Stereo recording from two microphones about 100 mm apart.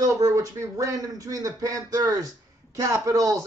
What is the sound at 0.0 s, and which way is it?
Speech, 35° right (ahead or behind).